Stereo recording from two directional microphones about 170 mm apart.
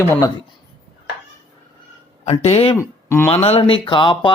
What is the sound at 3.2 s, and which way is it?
A man's voice, 35° left (ahead or behind).